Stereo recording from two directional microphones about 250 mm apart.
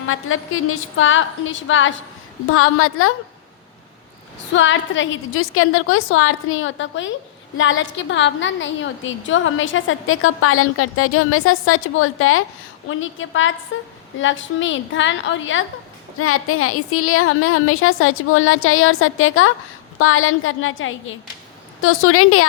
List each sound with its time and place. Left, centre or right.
0.1 s a woman's voice: left
4.5 s a woman's voice: left
16.1 s a woman's voice: left